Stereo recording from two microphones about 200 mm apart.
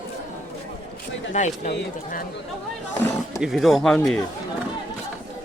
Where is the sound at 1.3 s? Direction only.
35° left (ahead or behind).